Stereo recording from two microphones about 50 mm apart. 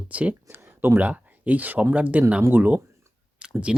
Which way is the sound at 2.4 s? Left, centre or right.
Right.